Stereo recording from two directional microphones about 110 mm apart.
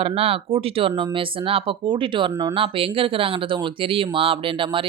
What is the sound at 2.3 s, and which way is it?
Speech, 30° right (ahead or behind).